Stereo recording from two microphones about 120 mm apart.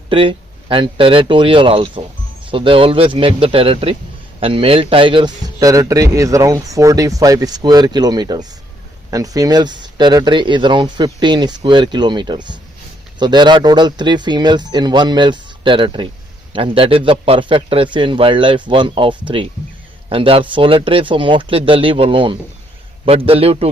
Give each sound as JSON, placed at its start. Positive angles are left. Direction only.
{"t": 0.1, "sound": "speech", "side_deg": -50}
{"t": 5.5, "sound": "speech", "side_deg": -30}